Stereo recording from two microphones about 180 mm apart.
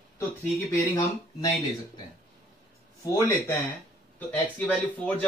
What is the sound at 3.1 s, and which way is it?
Speech, 15° left (ahead or behind).